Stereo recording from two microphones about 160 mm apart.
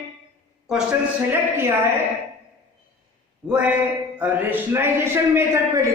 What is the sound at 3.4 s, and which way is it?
Speech, 5° right (ahead or behind).